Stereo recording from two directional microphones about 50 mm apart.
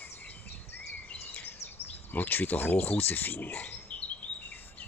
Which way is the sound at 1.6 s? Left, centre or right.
Left.